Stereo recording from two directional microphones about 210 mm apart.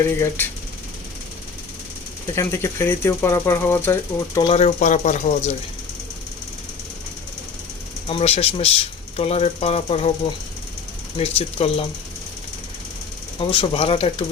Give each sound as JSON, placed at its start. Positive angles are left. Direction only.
{"t": 0.1, "sound": "speech", "side_deg": 10}
{"t": 2.3, "sound": "speech", "side_deg": 15}
{"t": 4.4, "sound": "speech", "side_deg": 25}
{"t": 8.0, "sound": "speech", "side_deg": 25}
{"t": 11.2, "sound": "speech", "side_deg": 30}
{"t": 13.5, "sound": "speech", "side_deg": 25}